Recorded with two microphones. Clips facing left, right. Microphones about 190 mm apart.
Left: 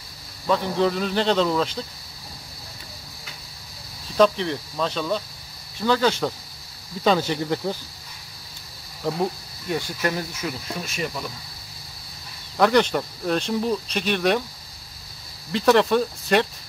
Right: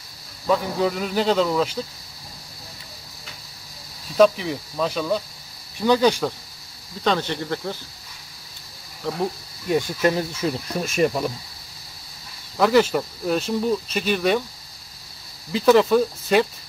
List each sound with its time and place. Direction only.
0.5 s speech: 5° right (ahead or behind)
4.2 s speech: 5° right (ahead or behind)
7.1 s speech: 10° left (ahead or behind)
9.7 s speech: 20° right (ahead or behind)
11.0 s speech: 45° right (ahead or behind)
12.5 s speech: centre (ahead or behind)
15.5 s speech: centre (ahead or behind)